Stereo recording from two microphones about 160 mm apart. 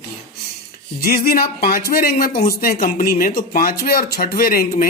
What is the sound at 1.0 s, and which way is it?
Speech, 65° left (ahead or behind).